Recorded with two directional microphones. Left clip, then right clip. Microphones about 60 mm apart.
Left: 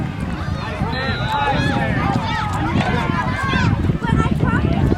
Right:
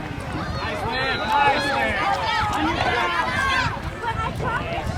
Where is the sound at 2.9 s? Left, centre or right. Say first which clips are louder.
Even; right.